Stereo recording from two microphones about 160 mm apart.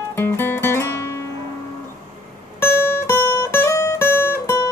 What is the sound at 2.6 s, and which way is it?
Music, 15° left (ahead or behind).